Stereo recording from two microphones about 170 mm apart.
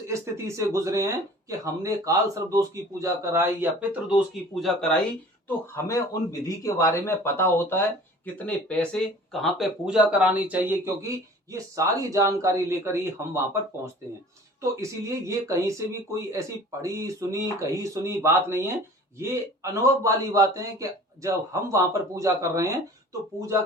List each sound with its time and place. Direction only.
0.1 s speech: 15° right (ahead or behind)
4.6 s speech: 5° left (ahead or behind)
5.5 s speech: 15° left (ahead or behind); by 22.7 s 20° right (ahead or behind)